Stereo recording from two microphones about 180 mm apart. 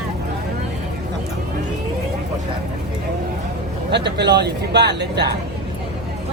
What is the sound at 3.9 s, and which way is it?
Speech, 70° right (ahead or behind).